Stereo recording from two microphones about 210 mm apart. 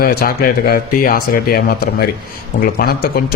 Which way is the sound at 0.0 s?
45° left (ahead or behind).